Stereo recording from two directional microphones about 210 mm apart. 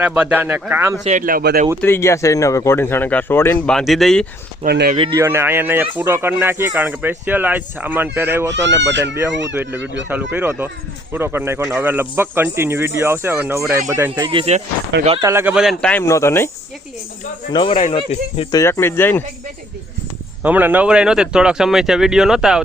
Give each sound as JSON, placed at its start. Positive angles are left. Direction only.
{"t": 0.0, "sound": "speech", "side_deg": -5}
{"t": 1.0, "sound": "speech", "side_deg": -40}
{"t": 1.8, "sound": "a man's voice", "side_deg": 10}
{"t": 4.6, "sound": "speech", "side_deg": -50}
{"t": 5.1, "sound": "speech", "side_deg": -10}
{"t": 8.9, "sound": "speech", "side_deg": -55}
{"t": 9.5, "sound": "speech", "side_deg": -10}
{"t": 14.3, "sound": "speech", "side_deg": -30}
{"t": 15.2, "sound": "speech", "side_deg": -10}
{"t": 17.5, "sound": "speech", "side_deg": 25}
{"t": 18.6, "sound": "a man's voice", "side_deg": 10}
{"t": 20.4, "sound": "speech", "side_deg": -10}